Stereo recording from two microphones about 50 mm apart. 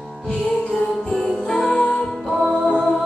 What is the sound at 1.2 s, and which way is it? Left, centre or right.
Music, centre.